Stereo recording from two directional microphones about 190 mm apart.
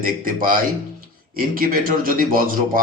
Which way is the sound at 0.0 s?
45° right (ahead or behind).